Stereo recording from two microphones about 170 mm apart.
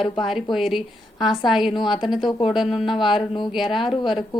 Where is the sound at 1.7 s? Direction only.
25° left (ahead or behind).